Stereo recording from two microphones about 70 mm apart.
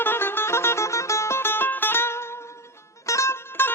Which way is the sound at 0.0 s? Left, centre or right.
Left.